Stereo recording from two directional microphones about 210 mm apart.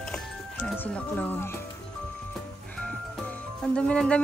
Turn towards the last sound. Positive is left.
turn(degrees=5)  # may be behind; listen again after turning